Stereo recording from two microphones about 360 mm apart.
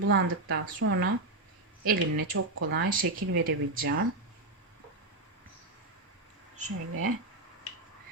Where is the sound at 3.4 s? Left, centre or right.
Right.